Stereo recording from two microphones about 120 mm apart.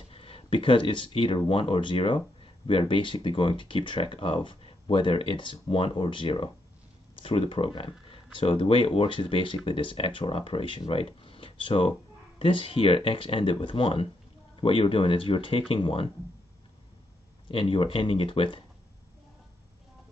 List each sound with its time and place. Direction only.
0.1 s speech: 50° left (ahead or behind)
17.5 s speech: 50° left (ahead or behind)